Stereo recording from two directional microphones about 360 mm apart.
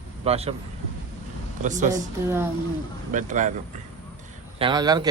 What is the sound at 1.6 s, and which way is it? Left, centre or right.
Speech, centre.